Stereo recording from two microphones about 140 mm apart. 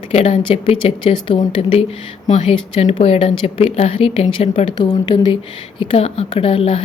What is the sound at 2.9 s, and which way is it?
Speech, 45° left (ahead or behind).